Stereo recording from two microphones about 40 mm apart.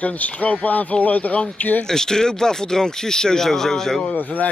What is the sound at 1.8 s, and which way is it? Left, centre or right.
Speech, centre.